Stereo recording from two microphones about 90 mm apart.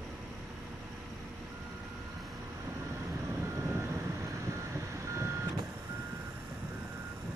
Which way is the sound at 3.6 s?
30° right (ahead or behind).